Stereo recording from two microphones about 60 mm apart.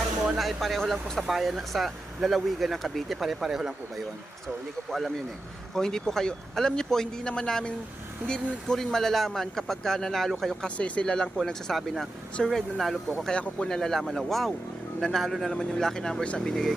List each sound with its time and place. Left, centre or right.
0.3 s a man's voice: centre
10.8 s a man's voice: left; by 13.0 s centre
13.2 s a man's voice: centre